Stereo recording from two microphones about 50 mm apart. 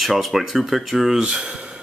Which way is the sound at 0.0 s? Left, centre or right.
Centre.